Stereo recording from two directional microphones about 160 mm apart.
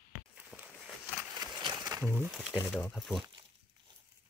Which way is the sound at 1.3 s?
25° right (ahead or behind).